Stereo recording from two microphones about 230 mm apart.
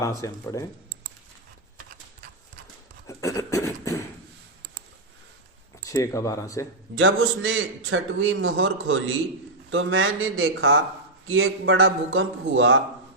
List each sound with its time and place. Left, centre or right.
0.0 s speech: centre
3.1 s a sound: centre
5.8 s speech: centre
6.9 s a man's voice: right